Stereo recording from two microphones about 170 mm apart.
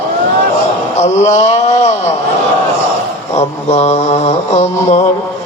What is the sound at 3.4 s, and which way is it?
Mantra, 40° left (ahead or behind).